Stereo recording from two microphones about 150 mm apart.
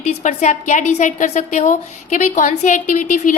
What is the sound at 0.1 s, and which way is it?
A woman's voice, 55° left (ahead or behind).